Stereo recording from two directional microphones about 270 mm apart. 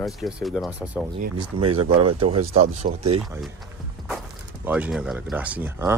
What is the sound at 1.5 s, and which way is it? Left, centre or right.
Speech, centre.